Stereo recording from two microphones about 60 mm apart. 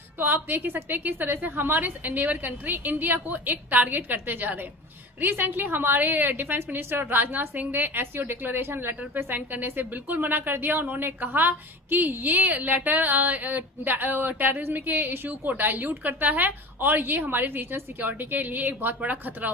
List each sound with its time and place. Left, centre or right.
0.2 s a woman's voice: right